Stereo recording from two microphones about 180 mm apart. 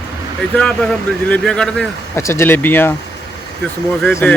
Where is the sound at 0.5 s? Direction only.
5° left (ahead or behind).